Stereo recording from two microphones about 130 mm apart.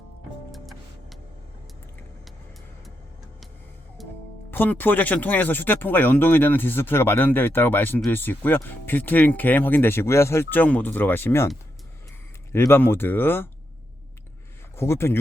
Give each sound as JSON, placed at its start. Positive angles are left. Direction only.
{"t": 0.5, "sound": "music", "side_deg": 0}
{"t": 4.0, "sound": "music", "side_deg": 0}
{"t": 4.5, "sound": "speech", "side_deg": 15}
{"t": 14.8, "sound": "speech", "side_deg": 20}